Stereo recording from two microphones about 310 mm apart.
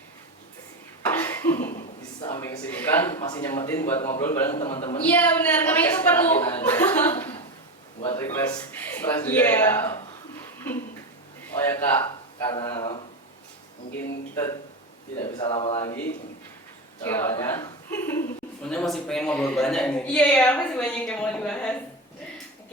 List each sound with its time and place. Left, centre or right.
1.1 s cough: centre
2.2 s a woman's voice: centre
4.8 s a woman's voice: centre
5.0 s a woman's voice: centre
15.2 s speech: centre
17.0 s a woman's voice: centre